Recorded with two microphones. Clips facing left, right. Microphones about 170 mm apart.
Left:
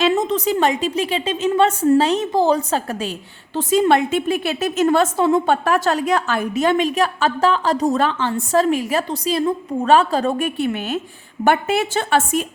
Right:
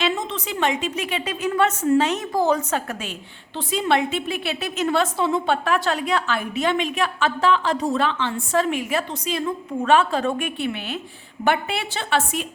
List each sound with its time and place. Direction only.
0.0 s a woman's voice: 45° left (ahead or behind)